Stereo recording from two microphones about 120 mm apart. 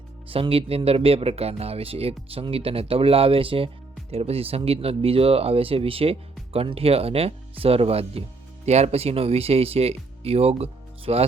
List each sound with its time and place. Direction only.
0.3 s speech: 50° right (ahead or behind)